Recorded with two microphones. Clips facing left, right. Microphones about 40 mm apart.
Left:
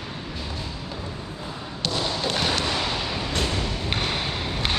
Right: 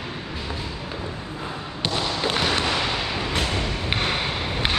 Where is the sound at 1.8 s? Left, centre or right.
Centre.